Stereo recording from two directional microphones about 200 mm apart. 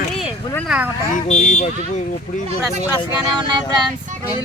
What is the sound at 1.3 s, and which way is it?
Speech, 35° left (ahead or behind).